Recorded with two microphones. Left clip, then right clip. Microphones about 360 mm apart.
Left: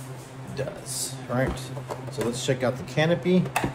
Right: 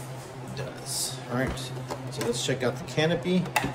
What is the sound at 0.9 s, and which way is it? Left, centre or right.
Speech, centre.